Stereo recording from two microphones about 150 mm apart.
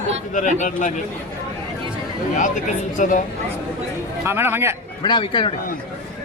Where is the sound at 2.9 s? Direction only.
60° left (ahead or behind).